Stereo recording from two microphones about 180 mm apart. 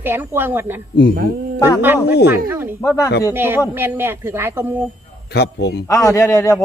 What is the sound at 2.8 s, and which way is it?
Speech, 15° left (ahead or behind).